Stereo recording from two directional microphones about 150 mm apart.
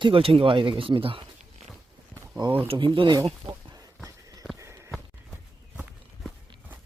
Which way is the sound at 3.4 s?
25° right (ahead or behind).